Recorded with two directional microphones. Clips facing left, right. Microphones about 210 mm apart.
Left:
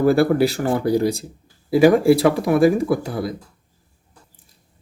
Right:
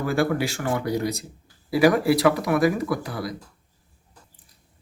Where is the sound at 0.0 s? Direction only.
35° left (ahead or behind).